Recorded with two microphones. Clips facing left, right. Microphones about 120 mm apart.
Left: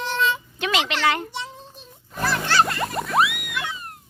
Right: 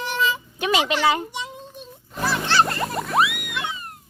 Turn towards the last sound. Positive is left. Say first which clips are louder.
# right 1 dB
turn(degrees=0)  # may be behind; listen again after turning